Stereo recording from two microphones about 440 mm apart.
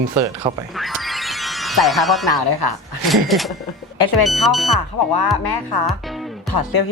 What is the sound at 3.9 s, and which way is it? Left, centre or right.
Speech, left.